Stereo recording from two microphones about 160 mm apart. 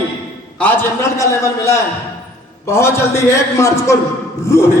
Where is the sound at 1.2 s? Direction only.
20° left (ahead or behind).